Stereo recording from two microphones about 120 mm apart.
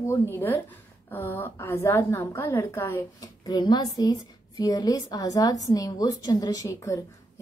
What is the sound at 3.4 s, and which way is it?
A woman's voice, 35° left (ahead or behind).